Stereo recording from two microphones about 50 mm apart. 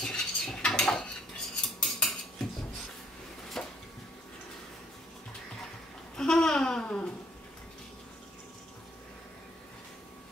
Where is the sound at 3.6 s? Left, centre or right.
Centre.